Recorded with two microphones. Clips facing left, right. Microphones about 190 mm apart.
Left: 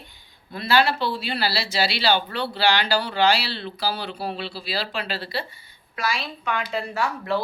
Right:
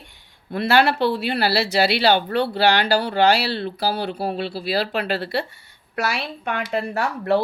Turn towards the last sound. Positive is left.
turn(degrees=-65)  # may be behind; listen again after turning